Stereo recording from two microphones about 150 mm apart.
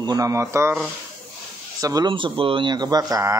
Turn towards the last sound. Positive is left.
turn(degrees=-25)  # may be behind; listen again after turning